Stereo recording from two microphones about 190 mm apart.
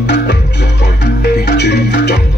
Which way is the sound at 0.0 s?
65° left (ahead or behind).